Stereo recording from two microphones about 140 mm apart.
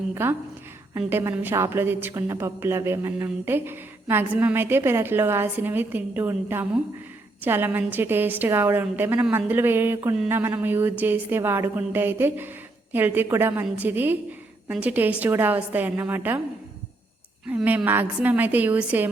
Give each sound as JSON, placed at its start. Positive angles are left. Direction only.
{"t": 0.1, "sound": "a woman's voice", "side_deg": -15}
{"t": 17.5, "sound": "a woman's voice", "side_deg": -10}